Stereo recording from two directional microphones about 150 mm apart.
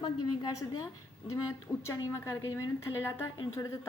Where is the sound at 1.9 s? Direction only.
20° left (ahead or behind).